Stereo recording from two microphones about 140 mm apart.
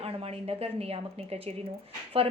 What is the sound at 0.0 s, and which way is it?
Speech, 45° right (ahead or behind).